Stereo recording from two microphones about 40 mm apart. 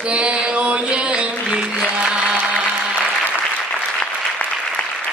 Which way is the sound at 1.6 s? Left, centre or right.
Centre.